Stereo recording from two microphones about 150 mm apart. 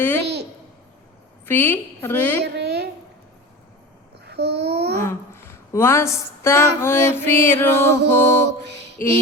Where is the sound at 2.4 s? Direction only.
90° right.